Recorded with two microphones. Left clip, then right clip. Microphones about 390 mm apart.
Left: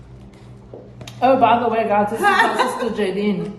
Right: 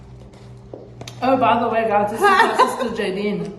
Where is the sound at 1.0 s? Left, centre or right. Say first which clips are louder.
Left 2 dB; centre.